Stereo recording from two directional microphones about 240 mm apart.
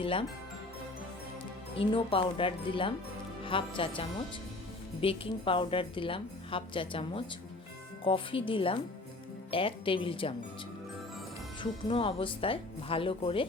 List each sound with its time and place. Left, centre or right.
0.0 s a woman's voice: left
1.7 s a woman's voice: left
11.6 s a woman's voice: left